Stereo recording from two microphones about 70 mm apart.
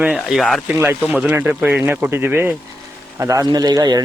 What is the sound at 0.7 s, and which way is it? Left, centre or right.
Speech, right.